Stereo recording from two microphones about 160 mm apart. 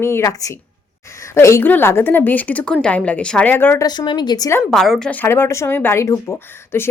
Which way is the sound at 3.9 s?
25° left (ahead or behind).